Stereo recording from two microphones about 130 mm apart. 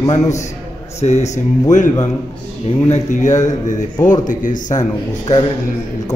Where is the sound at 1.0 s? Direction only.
60° left (ahead or behind).